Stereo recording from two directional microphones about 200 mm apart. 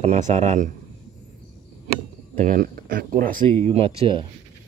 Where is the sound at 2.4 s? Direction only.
45° right (ahead or behind).